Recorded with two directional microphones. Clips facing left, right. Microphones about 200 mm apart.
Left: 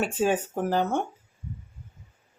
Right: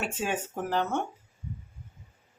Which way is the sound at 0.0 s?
40° left (ahead or behind).